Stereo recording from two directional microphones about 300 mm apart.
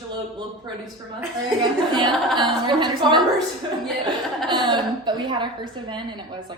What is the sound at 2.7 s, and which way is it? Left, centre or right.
Speech, centre.